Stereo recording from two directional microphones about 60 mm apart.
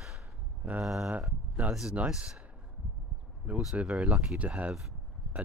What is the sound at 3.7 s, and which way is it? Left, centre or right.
Speech, right.